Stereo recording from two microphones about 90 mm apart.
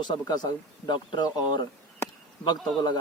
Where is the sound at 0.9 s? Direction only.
55° left (ahead or behind).